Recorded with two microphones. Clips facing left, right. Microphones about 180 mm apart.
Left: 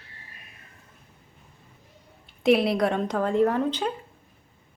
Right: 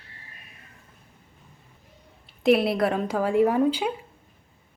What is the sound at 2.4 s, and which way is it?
Speech, centre (ahead or behind).